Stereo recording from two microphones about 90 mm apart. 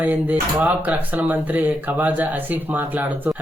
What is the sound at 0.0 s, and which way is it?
A man's voice, 20° right (ahead or behind).